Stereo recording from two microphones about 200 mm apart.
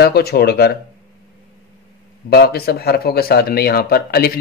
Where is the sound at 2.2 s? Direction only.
50° left (ahead or behind).